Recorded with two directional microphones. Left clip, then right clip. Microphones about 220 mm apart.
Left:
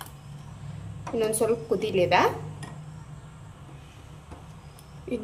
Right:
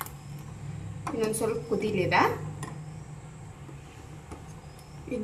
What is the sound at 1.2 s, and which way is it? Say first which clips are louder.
A woman's voice: left 4 dB; 50° left (ahead or behind).